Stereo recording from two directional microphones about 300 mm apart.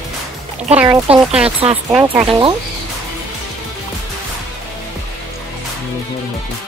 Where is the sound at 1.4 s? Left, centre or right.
Centre.